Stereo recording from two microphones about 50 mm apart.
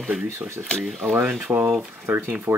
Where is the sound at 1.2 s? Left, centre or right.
Right.